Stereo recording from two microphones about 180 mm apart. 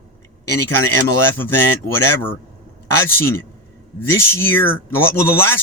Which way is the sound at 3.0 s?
15° left (ahead or behind).